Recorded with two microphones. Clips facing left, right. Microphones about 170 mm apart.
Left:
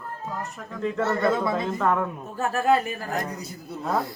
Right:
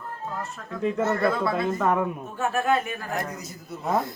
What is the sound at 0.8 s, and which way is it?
Speech, 15° right (ahead or behind).